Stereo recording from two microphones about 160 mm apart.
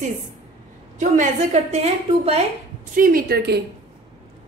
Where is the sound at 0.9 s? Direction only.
50° right (ahead or behind).